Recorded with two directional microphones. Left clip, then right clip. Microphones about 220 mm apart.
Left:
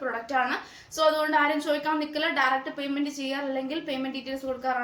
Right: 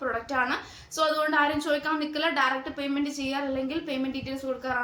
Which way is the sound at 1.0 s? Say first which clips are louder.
Left 1 dB; 15° right (ahead or behind).